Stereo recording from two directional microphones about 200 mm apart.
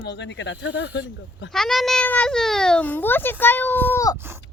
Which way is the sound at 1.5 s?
Centre (ahead or behind).